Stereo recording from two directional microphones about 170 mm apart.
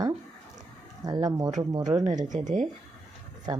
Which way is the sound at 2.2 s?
45° right (ahead or behind).